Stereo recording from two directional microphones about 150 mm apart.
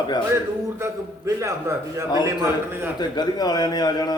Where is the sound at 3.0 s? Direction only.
25° left (ahead or behind).